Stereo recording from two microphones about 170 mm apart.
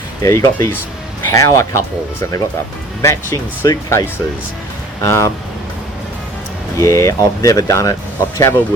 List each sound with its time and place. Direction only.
0.2 s speech: 15° left (ahead or behind)
3.0 s speech: 15° left (ahead or behind)
6.7 s speech: 20° left (ahead or behind)